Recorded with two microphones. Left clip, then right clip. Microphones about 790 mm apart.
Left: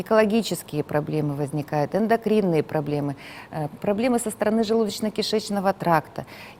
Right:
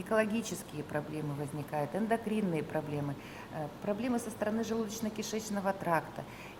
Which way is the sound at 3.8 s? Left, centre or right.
Left.